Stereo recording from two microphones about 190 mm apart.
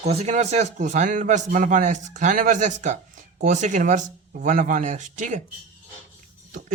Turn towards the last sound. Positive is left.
turn(degrees=-40)  # may be behind; listen again after turning